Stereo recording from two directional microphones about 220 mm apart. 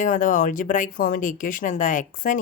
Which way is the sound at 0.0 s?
35° left (ahead or behind).